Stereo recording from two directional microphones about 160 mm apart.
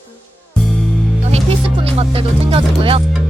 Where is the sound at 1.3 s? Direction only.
35° right (ahead or behind).